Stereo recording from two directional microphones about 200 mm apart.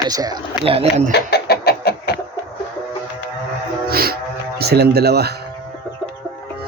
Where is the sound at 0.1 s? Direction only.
20° right (ahead or behind).